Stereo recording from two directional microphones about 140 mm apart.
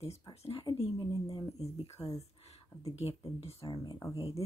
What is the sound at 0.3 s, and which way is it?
Speech, 45° left (ahead or behind).